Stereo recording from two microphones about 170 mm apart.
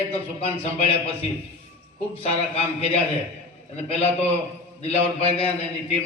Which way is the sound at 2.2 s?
35° left (ahead or behind).